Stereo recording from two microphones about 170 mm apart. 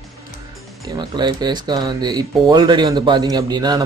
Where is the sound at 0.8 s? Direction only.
25° right (ahead or behind).